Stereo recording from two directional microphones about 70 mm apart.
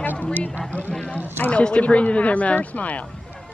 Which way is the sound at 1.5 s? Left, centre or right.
Centre.